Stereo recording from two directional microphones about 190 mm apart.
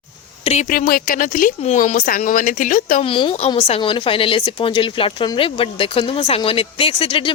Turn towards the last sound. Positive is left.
turn(degrees=30)  # may be behind; listen again after turning